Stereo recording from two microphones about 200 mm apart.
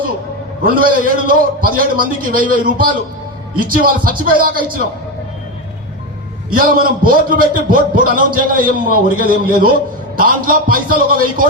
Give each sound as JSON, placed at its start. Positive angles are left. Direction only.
{"t": 0.6, "sound": "a man's voice", "side_deg": -45}
{"t": 6.5, "sound": "a man's voice", "side_deg": -45}